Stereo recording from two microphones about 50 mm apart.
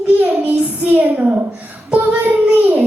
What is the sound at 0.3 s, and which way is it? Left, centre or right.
Child singing, right.